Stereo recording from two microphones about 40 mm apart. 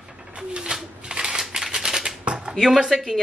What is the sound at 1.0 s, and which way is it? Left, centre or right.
Shuffling cards, right.